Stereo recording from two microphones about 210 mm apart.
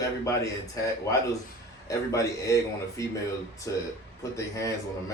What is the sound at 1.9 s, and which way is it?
A man's voice, 15° left (ahead or behind).